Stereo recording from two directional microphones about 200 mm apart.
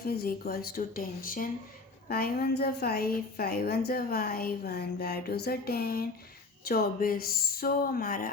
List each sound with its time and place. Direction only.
0.0 s a woman's voice: 50° left (ahead or behind)